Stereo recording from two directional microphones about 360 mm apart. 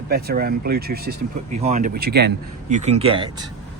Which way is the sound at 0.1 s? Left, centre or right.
Right.